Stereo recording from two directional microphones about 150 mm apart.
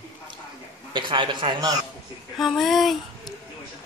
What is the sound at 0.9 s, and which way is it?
Speech, 35° right (ahead or behind).